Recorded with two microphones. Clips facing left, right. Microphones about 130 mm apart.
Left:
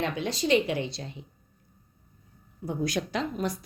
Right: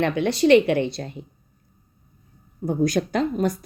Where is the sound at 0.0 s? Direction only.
65° right (ahead or behind).